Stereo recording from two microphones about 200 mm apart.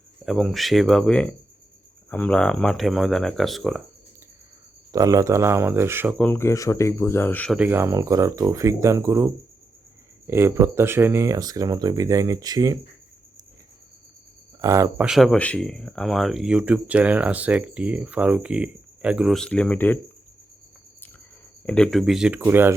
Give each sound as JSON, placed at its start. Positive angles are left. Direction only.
{"t": 0.3, "sound": "speech", "side_deg": 0}
{"t": 4.9, "sound": "speech", "side_deg": -15}
{"t": 6.1, "sound": "speech", "side_deg": 10}
{"t": 7.5, "sound": "speech", "side_deg": -10}
{"t": 14.6, "sound": "speech", "side_deg": -15}
{"t": 15.0, "sound": "speech", "side_deg": 0}
{"t": 21.7, "sound": "speech", "side_deg": 5}